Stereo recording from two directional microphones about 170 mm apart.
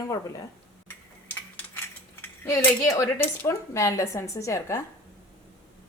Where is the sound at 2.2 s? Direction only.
20° left (ahead or behind).